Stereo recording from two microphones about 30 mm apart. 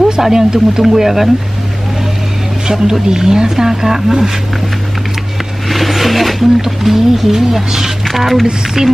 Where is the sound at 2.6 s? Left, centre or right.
Right.